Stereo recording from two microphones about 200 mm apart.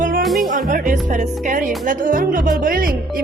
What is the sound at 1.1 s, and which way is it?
Speech, 40° right (ahead or behind).